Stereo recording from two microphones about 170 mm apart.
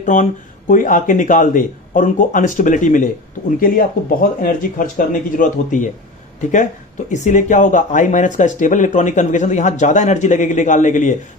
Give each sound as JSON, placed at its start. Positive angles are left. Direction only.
{"t": 0.0, "sound": "speech", "side_deg": 50}
{"t": 7.1, "sound": "speech", "side_deg": 45}